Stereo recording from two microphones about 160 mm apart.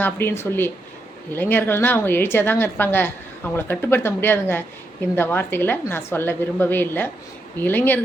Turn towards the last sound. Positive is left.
turn(degrees=10)  # may be behind; listen again after turning